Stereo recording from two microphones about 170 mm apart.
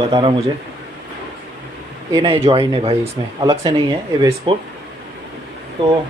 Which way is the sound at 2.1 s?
30° right (ahead or behind).